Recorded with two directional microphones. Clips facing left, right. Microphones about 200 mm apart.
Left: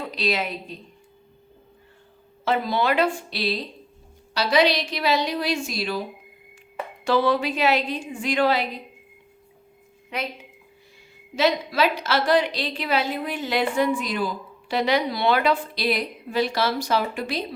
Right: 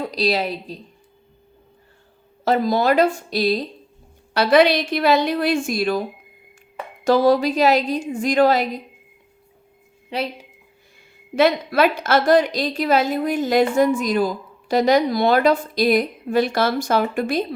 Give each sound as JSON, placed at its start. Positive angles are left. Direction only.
{"t": 0.0, "sound": "a woman's voice", "side_deg": -35}
{"t": 2.4, "sound": "a woman's voice", "side_deg": -40}
{"t": 4.4, "sound": "a woman's voice", "side_deg": -55}
{"t": 10.1, "sound": "a woman's voice", "side_deg": -30}
{"t": 11.3, "sound": "a woman's voice", "side_deg": -55}